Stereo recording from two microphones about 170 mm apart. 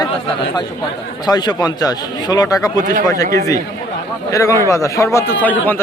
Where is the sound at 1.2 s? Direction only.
25° left (ahead or behind).